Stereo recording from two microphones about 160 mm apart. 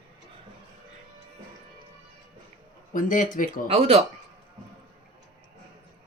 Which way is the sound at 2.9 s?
55° left (ahead or behind).